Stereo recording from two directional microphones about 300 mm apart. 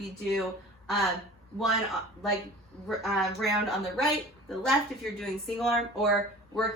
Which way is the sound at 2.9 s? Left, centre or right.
Centre.